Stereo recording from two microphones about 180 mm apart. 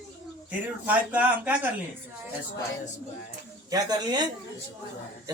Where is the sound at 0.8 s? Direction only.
10° right (ahead or behind).